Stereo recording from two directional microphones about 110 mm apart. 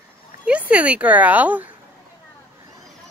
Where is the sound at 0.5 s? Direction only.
10° right (ahead or behind).